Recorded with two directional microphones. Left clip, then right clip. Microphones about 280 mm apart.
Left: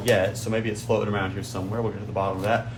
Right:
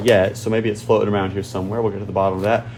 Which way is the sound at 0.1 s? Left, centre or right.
Right.